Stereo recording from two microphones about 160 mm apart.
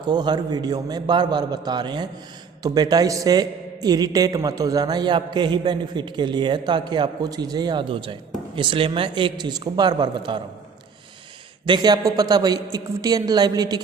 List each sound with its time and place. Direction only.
0.0 s a man's voice: 25° right (ahead or behind)
11.6 s a man's voice: 25° right (ahead or behind)